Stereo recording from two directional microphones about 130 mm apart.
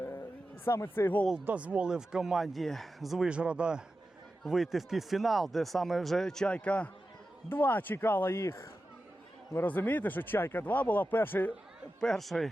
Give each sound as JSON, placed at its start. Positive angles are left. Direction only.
{"t": 0.0, "sound": "a sound", "side_deg": 15}
{"t": 1.5, "sound": "speech", "side_deg": -10}
{"t": 11.9, "sound": "speech", "side_deg": 5}